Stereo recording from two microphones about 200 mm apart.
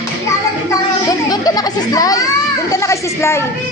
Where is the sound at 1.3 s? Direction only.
20° left (ahead or behind).